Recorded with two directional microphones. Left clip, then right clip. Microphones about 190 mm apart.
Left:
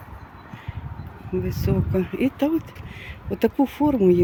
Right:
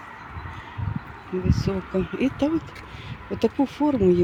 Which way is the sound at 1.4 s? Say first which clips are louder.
Left 1 dB; 20° left (ahead or behind).